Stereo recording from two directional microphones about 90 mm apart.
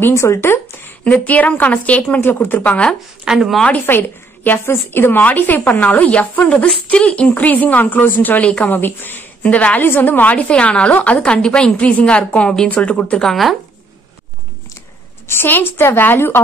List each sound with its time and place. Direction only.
0.0 s speech: 30° left (ahead or behind)
1.0 s a woman's voice: 15° left (ahead or behind)
3.3 s speech: centre (ahead or behind)
3.6 s a woman's voice: 20° left (ahead or behind)
13.2 s speech: centre (ahead or behind)
15.2 s a woman's voice: 25° left (ahead or behind)